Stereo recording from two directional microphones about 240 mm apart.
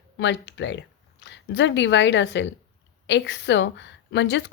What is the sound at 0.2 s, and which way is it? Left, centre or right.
A woman's voice, left.